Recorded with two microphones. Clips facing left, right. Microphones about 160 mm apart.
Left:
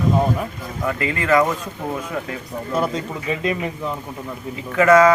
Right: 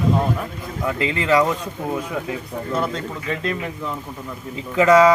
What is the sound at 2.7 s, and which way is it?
Speech, 5° left (ahead or behind).